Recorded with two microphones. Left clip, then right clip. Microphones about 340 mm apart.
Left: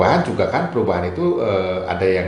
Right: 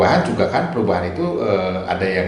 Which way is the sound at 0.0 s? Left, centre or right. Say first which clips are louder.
Right 1 dB; left.